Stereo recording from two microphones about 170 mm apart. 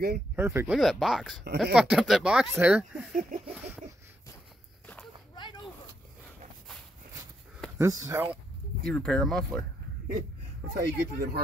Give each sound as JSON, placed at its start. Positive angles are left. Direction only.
{"t": 0.4, "sound": "speech", "side_deg": -15}
{"t": 0.7, "sound": "speech", "side_deg": 0}
{"t": 3.2, "sound": "a sound", "side_deg": -50}
{"t": 5.3, "sound": "a sound", "side_deg": 25}
{"t": 7.7, "sound": "speech", "side_deg": -15}
{"t": 8.8, "sound": "speech", "side_deg": 5}
{"t": 10.7, "sound": "speech", "side_deg": -70}